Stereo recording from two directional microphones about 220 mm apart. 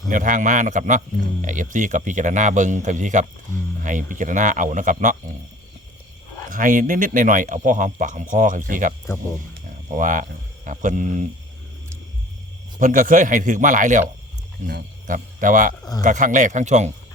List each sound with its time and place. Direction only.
0.1 s a man's voice: 35° right (ahead or behind)
6.5 s a man's voice: 35° right (ahead or behind)
9.9 s a man's voice: 35° right (ahead or behind)
12.8 s a man's voice: 35° right (ahead or behind)
15.8 s speech: 15° left (ahead or behind)
16.0 s a man's voice: 35° right (ahead or behind)